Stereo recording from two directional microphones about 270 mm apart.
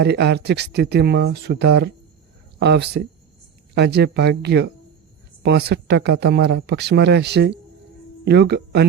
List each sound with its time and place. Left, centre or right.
0.0 s speech: right